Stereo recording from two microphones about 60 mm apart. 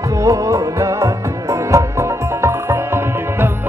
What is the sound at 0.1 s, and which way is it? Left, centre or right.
Music, right.